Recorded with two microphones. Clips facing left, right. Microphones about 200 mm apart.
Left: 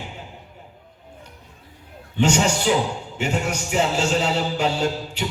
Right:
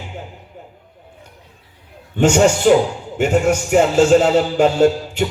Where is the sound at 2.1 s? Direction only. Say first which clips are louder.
Right 6 dB; 50° right (ahead or behind).